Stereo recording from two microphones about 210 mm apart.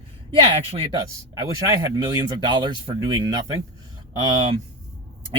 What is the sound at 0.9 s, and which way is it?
Speech, 20° right (ahead or behind).